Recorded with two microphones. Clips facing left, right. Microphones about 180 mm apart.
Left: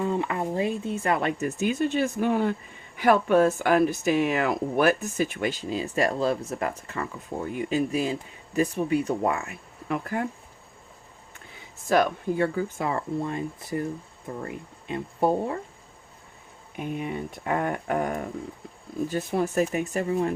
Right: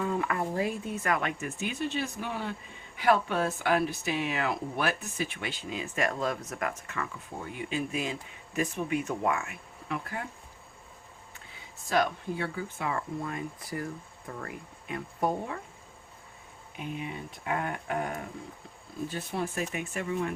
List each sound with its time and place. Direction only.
0.0 s speech: 25° left (ahead or behind)
9.9 s speech: 50° left (ahead or behind)
11.9 s speech: 50° left (ahead or behind); by 15.6 s 30° left (ahead or behind)
16.7 s speech: 50° left (ahead or behind)